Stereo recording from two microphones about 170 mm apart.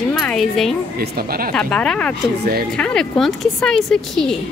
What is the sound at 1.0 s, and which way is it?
Speech, 60° right (ahead or behind).